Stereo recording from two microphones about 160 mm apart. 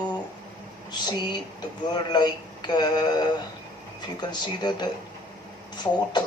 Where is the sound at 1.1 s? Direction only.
25° left (ahead or behind).